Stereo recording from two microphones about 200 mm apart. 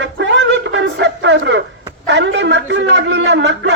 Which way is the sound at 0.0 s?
65° right (ahead or behind).